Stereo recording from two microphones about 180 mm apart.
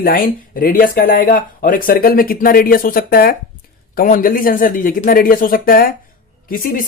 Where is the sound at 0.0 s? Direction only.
55° left (ahead or behind).